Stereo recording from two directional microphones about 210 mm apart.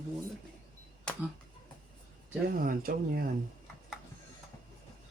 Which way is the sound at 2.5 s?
45° right (ahead or behind).